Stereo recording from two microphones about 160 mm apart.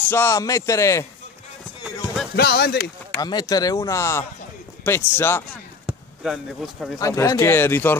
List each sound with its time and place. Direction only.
0.1 s speech: 15° left (ahead or behind)
2.3 s speech: 80° left
3.2 s speech: 25° left (ahead or behind)
5.9 s speech: 5° right (ahead or behind)
7.0 s speech: 20° left (ahead or behind)